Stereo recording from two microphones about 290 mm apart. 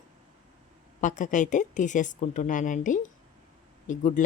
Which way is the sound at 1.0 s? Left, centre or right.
Left.